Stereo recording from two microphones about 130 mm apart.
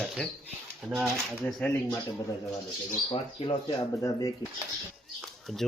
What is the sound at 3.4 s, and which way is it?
Speech, 40° left (ahead or behind).